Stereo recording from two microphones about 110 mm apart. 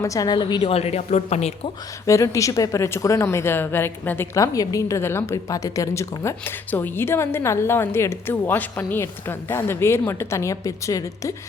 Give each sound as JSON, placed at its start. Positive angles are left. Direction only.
{"t": 0.0, "sound": "a woman's voice", "side_deg": 30}
{"t": 0.7, "sound": "speech", "side_deg": 70}
{"t": 2.0, "sound": "a woman's voice", "side_deg": 30}
{"t": 4.4, "sound": "a woman's voice", "side_deg": 30}